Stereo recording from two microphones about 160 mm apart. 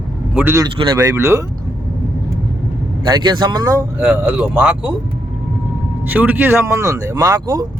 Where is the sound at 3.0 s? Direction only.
30° right (ahead or behind).